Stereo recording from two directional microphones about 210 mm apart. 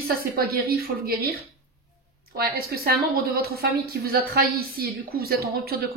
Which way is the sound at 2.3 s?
45° right (ahead or behind).